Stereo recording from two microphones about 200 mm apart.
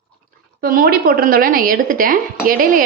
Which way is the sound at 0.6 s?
45° right (ahead or behind).